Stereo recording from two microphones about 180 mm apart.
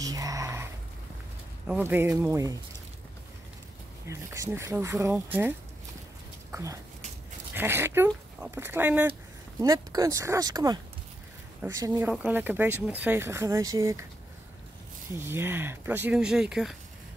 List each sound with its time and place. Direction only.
0.0 s dog: 20° right (ahead or behind)
1.7 s speech: 10° right (ahead or behind)
4.1 s speech: 15° right (ahead or behind)
6.5 s speech: 15° right (ahead or behind)
9.6 s speech: 20° right (ahead or behind)
15.1 s speech: 10° right (ahead or behind)